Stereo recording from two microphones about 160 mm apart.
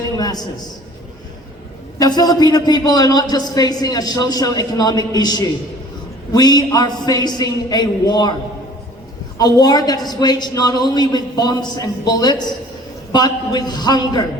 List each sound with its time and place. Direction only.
0.2 s a sound: 25° left (ahead or behind)
2.0 s a man's voice: 25° left (ahead or behind)
9.4 s a man's voice: 25° left (ahead or behind)